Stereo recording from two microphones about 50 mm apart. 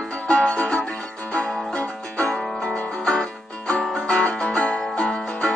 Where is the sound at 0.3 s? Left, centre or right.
Centre.